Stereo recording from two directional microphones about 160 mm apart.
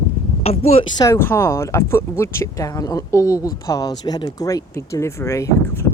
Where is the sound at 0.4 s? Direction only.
40° left (ahead or behind).